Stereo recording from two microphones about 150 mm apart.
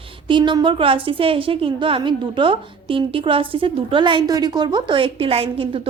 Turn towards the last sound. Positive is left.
turn(degrees=-40)  # may be behind; listen again after turning